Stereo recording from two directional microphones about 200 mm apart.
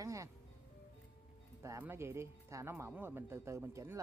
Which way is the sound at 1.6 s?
10° right (ahead or behind).